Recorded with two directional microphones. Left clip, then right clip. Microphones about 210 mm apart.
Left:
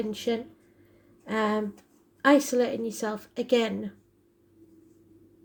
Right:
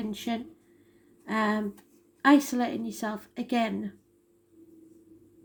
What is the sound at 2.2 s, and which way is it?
Speech, 35° left (ahead or behind).